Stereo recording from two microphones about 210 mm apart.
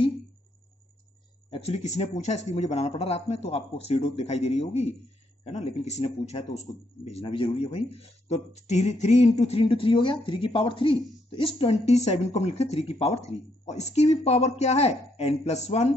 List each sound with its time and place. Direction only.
1.5 s speech: 30° left (ahead or behind)